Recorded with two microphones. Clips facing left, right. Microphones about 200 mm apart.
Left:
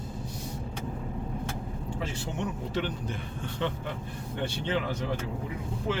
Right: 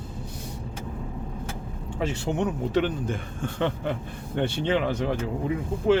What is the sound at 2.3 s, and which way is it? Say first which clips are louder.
Speech: right 7 dB; 60° right (ahead or behind).